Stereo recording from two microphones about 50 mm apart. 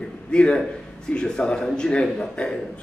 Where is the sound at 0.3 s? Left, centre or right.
Centre.